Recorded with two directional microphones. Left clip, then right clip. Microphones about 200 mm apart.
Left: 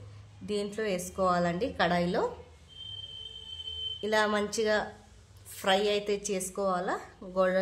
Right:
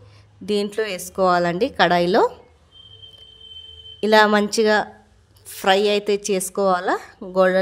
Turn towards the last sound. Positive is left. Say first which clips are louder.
# right 10 dB
turn(degrees=-45)  # may be behind; listen again after turning